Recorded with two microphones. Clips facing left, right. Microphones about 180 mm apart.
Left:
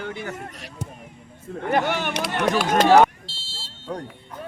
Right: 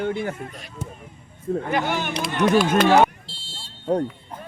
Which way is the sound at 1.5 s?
40° right (ahead or behind).